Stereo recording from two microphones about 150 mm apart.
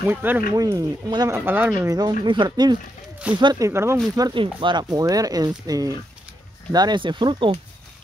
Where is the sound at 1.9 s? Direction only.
25° right (ahead or behind).